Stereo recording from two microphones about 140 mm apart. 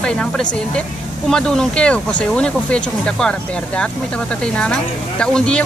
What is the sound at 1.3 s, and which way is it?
Speech, 5° left (ahead or behind).